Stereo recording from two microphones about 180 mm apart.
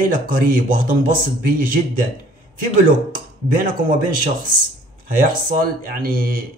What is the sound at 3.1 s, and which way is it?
Speech, 50° right (ahead or behind).